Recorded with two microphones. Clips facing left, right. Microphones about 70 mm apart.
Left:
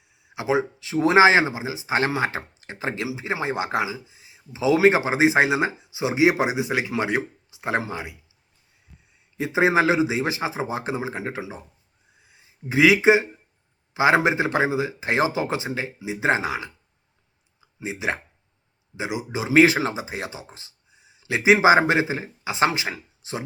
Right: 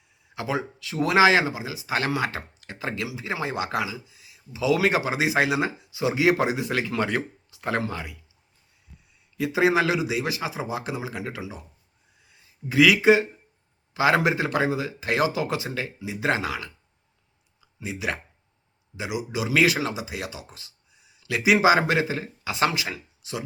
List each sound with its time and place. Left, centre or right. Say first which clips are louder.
0.3 s speech: left 5 dB; left
9.4 s speech: left 2 dB; left
12.2 s a sound: right 1 dB; left
13.9 s speech: left 2 dB; left
17.6 s a sound: left 2 dB; left
18.9 s speech: left 1 dB; left